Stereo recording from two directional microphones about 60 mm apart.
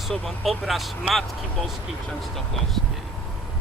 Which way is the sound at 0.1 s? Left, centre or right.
Centre.